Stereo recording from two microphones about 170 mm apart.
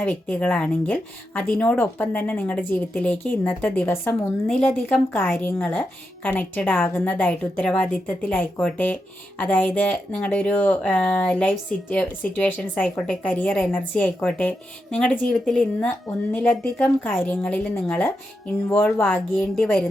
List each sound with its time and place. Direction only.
0.0 s speech: 10° left (ahead or behind)